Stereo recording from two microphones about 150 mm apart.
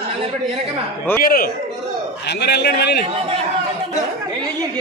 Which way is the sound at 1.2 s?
75° left (ahead or behind).